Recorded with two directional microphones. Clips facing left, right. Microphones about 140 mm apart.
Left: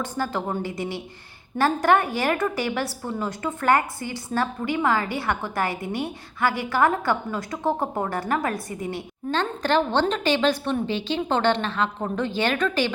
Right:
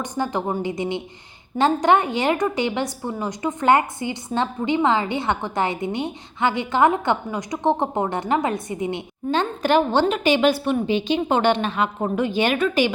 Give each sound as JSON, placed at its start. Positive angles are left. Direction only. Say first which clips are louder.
{"t": 0.0, "sound": "a woman's voice", "louder": "right 3 dB", "side_deg": -15}